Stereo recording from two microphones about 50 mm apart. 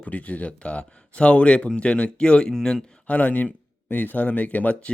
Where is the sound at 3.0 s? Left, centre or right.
Left.